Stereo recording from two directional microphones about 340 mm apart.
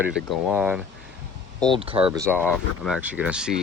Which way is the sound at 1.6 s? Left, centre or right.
Centre.